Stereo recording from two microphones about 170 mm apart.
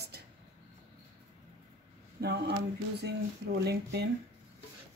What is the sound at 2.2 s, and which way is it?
Speech, 75° right (ahead or behind).